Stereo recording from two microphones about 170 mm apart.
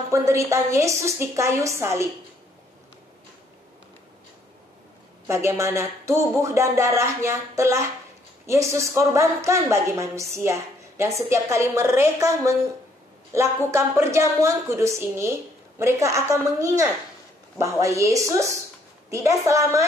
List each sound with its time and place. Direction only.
0.1 s a woman's voice: 15° right (ahead or behind)
5.3 s a woman's voice: 15° right (ahead or behind)